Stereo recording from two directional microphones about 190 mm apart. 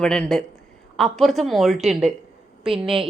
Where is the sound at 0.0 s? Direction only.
5° left (ahead or behind).